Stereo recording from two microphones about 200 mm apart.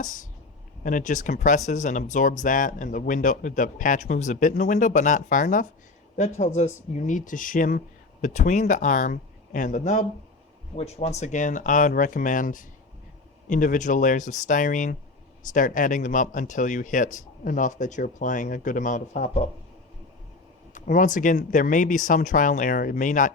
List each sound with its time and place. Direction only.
0.0 s speech: 40° left (ahead or behind)
20.7 s speech: 40° left (ahead or behind)